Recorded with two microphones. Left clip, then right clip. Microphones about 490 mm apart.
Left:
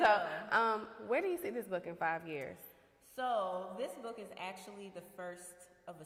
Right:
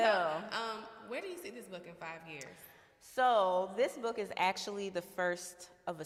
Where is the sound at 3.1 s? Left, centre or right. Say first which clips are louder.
Right 7 dB; right.